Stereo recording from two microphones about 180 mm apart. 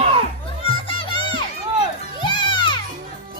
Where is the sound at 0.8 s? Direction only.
30° left (ahead or behind).